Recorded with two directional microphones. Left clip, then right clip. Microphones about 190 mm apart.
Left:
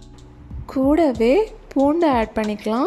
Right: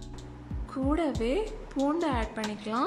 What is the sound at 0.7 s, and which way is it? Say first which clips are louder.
Speech: left 12 dB; 25° left (ahead or behind).